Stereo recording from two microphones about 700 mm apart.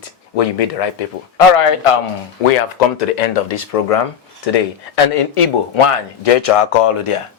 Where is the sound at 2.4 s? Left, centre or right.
Left.